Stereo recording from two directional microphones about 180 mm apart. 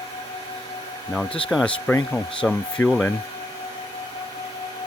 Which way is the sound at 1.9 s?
10° left (ahead or behind).